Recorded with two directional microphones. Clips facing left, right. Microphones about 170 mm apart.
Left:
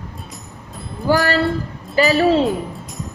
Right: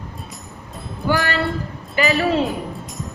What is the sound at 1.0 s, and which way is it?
Speech, 35° left (ahead or behind).